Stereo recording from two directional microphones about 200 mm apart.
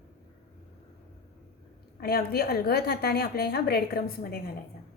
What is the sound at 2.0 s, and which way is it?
A woman's voice, 50° left (ahead or behind).